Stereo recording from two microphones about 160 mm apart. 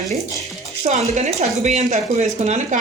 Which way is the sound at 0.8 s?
40° right (ahead or behind).